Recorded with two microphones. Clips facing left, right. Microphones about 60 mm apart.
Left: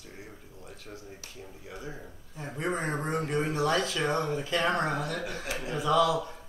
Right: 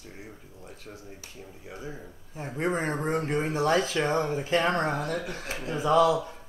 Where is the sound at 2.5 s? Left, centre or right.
Right.